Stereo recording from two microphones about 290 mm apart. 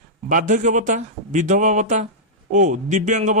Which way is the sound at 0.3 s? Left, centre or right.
Right.